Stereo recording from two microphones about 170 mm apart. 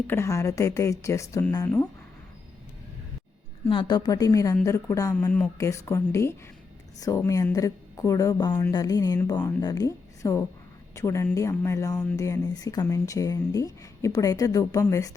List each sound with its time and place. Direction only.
0.1 s speech: 15° left (ahead or behind)
3.7 s a woman's voice: 30° left (ahead or behind)